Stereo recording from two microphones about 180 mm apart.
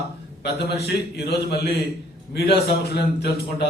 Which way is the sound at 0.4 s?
65° left (ahead or behind).